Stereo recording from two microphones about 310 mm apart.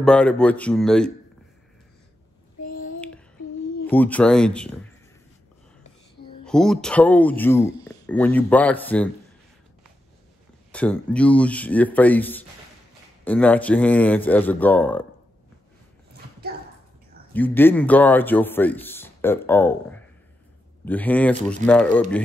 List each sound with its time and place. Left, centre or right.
0.0 s speech: centre
3.8 s speech: centre
6.4 s speech: centre
10.7 s speech: centre
16.1 s a sound: right
17.3 s a man's voice: centre